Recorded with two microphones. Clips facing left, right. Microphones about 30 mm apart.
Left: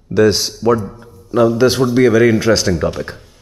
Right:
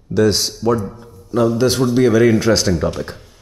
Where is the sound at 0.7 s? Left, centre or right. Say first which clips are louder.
Left 3 dB; centre.